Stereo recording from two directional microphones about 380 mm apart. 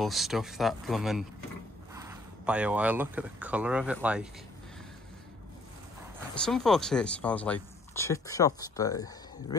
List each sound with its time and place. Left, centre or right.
0.0 s speech: centre
6.3 s speech: centre